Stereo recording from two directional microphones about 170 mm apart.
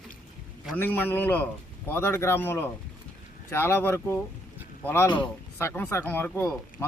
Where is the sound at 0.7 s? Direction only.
10° left (ahead or behind).